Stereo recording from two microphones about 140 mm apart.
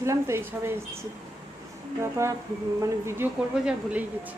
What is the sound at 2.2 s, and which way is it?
A woman's voice, 20° right (ahead or behind).